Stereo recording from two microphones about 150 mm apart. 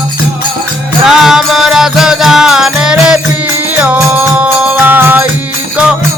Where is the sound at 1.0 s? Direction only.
5° right (ahead or behind).